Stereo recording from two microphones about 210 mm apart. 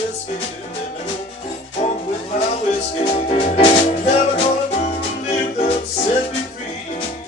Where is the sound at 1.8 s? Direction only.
30° left (ahead or behind).